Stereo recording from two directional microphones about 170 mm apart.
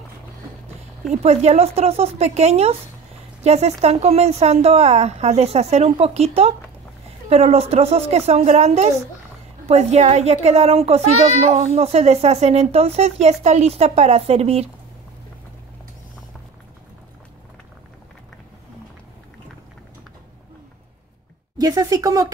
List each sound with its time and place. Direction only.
1.1 s speech: 40° right (ahead or behind)
21.5 s a woman's voice: 20° right (ahead or behind)